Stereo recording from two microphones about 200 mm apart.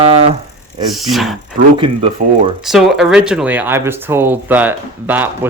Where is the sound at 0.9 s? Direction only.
Centre (ahead or behind).